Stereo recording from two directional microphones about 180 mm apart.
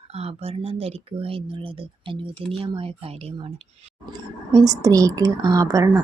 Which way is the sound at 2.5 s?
30° right (ahead or behind).